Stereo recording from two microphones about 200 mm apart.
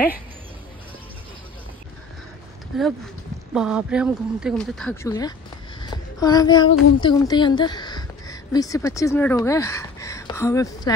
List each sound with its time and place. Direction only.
2.7 s speech: centre (ahead or behind)
5.0 s speech: 15° left (ahead or behind)
5.8 s a sound: 20° left (ahead or behind)
7.0 s speech: 20° left (ahead or behind)